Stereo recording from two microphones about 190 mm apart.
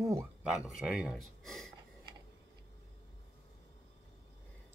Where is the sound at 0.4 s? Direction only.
5° right (ahead or behind).